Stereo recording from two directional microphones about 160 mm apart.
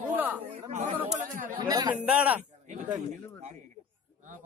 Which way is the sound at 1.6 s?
25° right (ahead or behind).